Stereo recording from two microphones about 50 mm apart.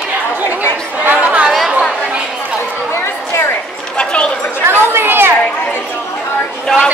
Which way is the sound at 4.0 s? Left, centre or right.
Left.